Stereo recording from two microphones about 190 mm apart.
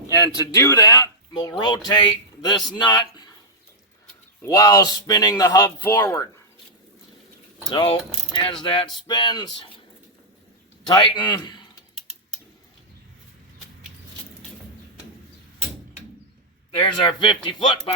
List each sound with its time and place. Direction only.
0.3 s speech: 15° left (ahead or behind)
4.4 s speech: 20° left (ahead or behind)
7.7 s speech: 25° left (ahead or behind)
10.8 s a man's voice: 25° left (ahead or behind)
16.7 s speech: 25° left (ahead or behind)